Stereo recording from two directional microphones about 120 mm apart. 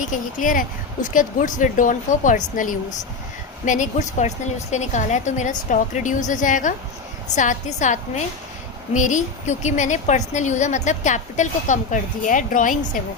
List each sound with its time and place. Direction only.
0.0 s a woman's voice: 90° left
4.7 s a woman's voice: 80° left